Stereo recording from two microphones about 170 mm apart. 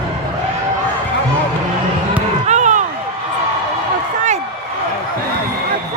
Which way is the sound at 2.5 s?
45° right (ahead or behind).